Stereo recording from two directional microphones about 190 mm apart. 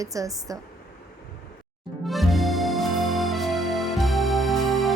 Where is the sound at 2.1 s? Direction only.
Centre (ahead or behind).